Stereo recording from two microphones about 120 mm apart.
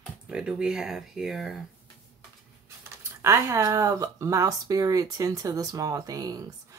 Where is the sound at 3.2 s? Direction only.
25° right (ahead or behind).